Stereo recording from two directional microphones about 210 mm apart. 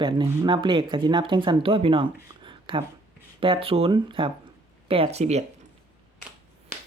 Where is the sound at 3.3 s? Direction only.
25° right (ahead or behind).